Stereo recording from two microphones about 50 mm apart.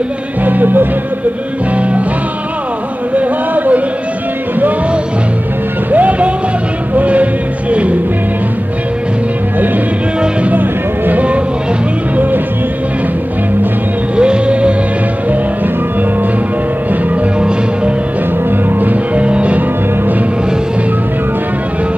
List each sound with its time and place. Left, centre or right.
0.4 s music: right
1.8 s music: right
3.2 s a sound: right
5.9 s music: right
10.5 s music: right
14.1 s music: centre
17.1 s music: right
18.7 s music: right
19.2 s music: right